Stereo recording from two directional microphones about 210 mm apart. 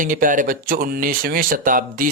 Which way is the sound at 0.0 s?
40° right (ahead or behind).